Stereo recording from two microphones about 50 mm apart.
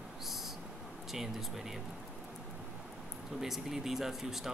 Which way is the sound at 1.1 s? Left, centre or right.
Centre.